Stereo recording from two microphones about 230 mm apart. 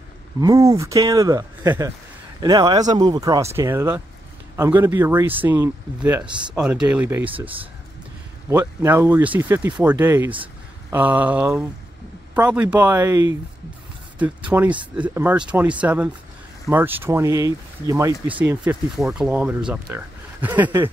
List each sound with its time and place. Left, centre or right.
0.4 s speech: centre
6.2 s speech: centre
6.6 s speech: centre
7.2 s speech: right
8.5 s speech: centre